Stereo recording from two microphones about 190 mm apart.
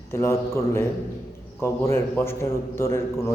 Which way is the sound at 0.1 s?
15° left (ahead or behind).